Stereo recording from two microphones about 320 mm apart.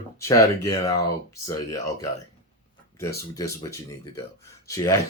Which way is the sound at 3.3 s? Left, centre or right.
Centre.